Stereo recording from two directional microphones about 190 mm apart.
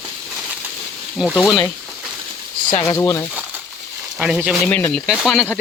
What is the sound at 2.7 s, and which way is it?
Speech, 25° left (ahead or behind).